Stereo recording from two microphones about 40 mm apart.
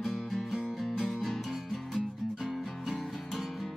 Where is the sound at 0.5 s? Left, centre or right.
Centre.